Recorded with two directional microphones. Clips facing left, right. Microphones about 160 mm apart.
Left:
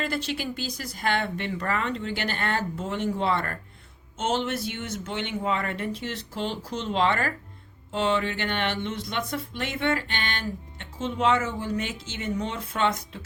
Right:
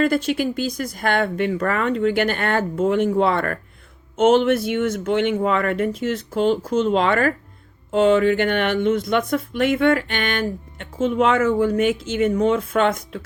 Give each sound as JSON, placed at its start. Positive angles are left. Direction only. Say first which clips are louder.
{"t": 0.0, "sound": "speech", "louder": "right 10 dB", "side_deg": -50}